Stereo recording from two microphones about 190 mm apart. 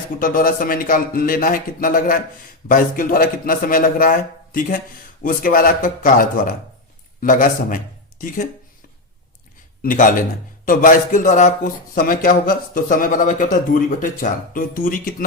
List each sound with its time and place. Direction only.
0.2 s a man's voice: 45° left (ahead or behind)
9.8 s a man's voice: 45° left (ahead or behind)